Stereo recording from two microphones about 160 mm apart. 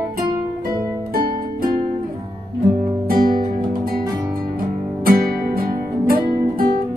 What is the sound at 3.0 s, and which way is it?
Music, 60° right (ahead or behind).